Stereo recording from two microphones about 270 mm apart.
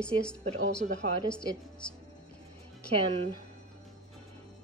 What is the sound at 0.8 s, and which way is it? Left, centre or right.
Speech, right.